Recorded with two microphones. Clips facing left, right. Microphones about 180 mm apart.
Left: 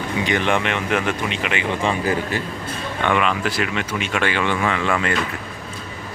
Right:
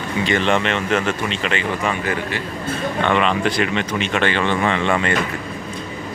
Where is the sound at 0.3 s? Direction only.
15° left (ahead or behind).